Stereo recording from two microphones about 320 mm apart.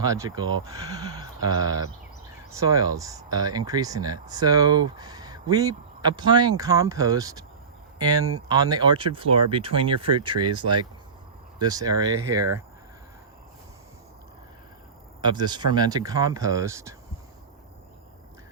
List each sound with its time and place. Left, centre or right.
0.0 s speech: centre
15.2 s speech: centre